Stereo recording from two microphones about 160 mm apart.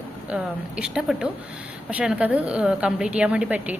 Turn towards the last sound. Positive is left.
turn(degrees=-10)  # may be behind; listen again after turning